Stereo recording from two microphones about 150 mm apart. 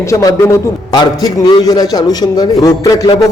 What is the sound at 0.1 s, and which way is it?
A man's voice, 20° left (ahead or behind).